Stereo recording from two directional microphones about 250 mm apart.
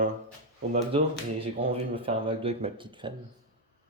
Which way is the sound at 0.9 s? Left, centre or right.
Right.